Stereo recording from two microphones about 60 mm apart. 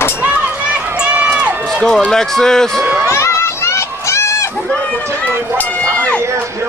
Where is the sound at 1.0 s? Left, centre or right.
Centre.